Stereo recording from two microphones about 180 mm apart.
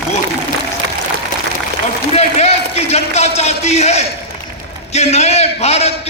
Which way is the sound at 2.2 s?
35° left (ahead or behind).